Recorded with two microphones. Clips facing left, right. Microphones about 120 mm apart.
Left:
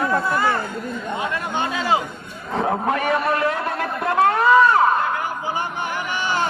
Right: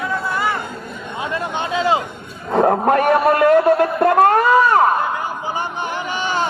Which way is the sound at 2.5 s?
50° right (ahead or behind).